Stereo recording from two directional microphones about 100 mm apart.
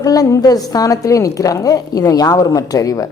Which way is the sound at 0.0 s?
35° left (ahead or behind).